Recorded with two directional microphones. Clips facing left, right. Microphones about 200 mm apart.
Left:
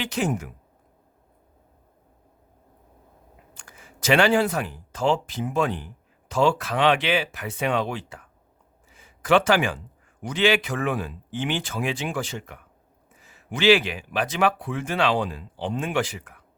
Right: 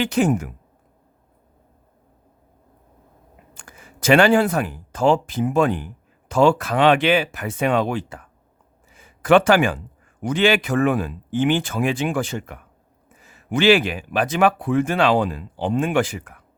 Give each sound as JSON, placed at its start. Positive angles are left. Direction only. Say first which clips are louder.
{"t": 0.0, "sound": "speech", "louder": "right 7 dB", "side_deg": -50}
{"t": 3.5, "sound": "speech", "louder": "right 4 dB", "side_deg": -50}